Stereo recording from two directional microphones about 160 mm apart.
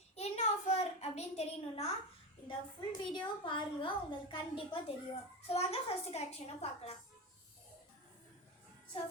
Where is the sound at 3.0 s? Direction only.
30° left (ahead or behind).